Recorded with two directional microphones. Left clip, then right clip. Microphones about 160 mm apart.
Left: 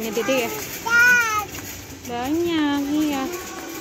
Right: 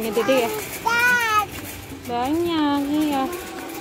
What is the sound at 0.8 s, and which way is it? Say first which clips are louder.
Child singing: left 3 dB; 15° right (ahead or behind).